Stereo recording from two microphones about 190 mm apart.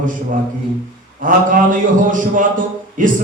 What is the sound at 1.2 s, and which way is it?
A man's voice, 45° right (ahead or behind).